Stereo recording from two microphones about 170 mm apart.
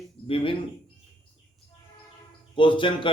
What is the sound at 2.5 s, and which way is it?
Speech, 30° left (ahead or behind).